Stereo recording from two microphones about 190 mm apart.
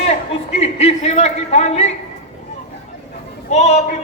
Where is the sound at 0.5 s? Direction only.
35° left (ahead or behind).